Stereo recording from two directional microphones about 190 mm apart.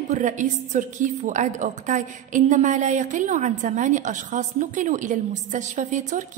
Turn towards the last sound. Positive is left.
turn(degrees=-40)  # may be behind; listen again after turning